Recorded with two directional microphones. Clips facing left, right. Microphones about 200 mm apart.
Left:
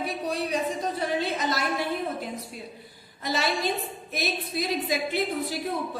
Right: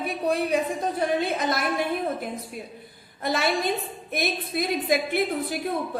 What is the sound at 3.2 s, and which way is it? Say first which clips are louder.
A woman's voice: right 3 dB; 55° right (ahead or behind).